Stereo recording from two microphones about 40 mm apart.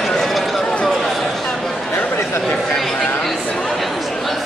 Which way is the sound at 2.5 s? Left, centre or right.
Centre.